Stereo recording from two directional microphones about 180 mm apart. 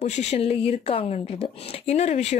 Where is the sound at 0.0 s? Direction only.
40° left (ahead or behind).